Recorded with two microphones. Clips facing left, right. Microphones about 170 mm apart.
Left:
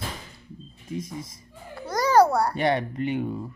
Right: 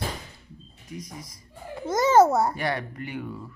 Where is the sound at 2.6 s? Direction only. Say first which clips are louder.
Left 5 dB; 25° left (ahead or behind).